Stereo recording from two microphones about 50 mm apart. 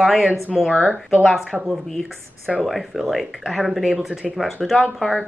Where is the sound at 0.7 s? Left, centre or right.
Right.